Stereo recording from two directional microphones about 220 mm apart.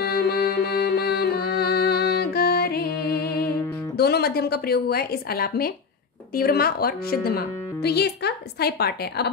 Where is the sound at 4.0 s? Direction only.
45° left (ahead or behind).